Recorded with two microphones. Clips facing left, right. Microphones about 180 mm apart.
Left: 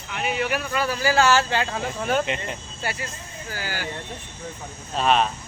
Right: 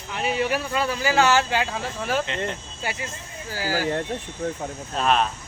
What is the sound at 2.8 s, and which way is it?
Speech, 15° right (ahead or behind).